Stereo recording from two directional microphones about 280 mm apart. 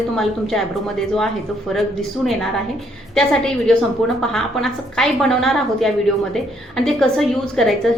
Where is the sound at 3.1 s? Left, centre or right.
Centre.